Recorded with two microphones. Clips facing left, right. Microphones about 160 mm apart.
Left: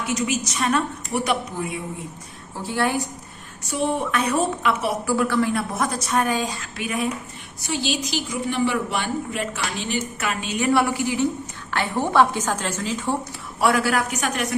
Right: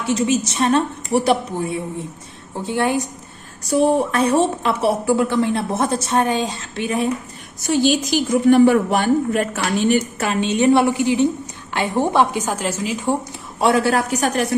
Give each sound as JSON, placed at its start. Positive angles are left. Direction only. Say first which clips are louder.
{"t": 0.0, "sound": "speech", "louder": "right 6 dB", "side_deg": -30}
{"t": 2.6, "sound": "speech", "louder": "right 3 dB", "side_deg": -20}
{"t": 3.6, "sound": "speech", "louder": "right 8 dB", "side_deg": -35}
{"t": 7.7, "sound": "a woman's voice", "louder": "right 8 dB", "side_deg": -50}
{"t": 10.2, "sound": "a woman's voice", "louder": "right 7 dB", "side_deg": -30}
{"t": 13.6, "sound": "a woman's voice", "louder": "right 4 dB", "side_deg": -25}